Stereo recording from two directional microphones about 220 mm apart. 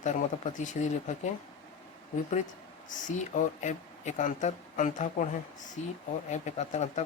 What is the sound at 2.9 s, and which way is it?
Speech, 35° left (ahead or behind).